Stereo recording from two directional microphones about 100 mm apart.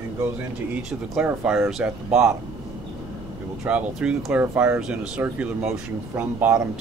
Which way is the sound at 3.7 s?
10° right (ahead or behind).